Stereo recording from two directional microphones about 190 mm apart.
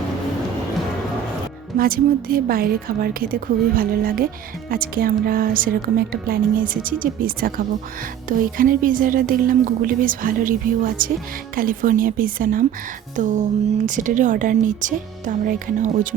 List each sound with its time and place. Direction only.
1.8 s a woman's voice: 50° right (ahead or behind)